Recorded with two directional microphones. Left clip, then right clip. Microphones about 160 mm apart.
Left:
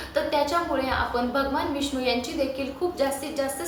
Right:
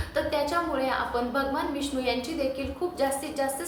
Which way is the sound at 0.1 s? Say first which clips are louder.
Left 3 dB; 5° right (ahead or behind).